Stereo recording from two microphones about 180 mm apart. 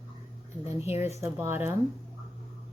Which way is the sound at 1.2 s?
15° right (ahead or behind).